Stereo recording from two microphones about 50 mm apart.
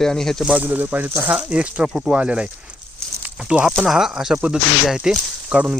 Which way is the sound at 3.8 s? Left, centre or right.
Centre.